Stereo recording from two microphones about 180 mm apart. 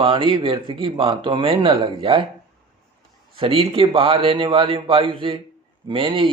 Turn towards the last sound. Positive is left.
turn(degrees=-30)  # may be behind; listen again after turning